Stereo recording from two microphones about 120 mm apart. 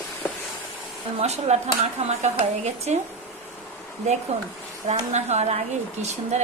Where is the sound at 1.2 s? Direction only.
65° right (ahead or behind).